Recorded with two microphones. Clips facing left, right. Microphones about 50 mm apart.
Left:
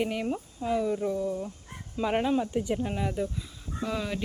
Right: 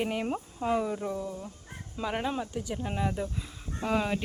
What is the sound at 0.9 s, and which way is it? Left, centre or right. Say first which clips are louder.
Speech: left 4 dB; centre.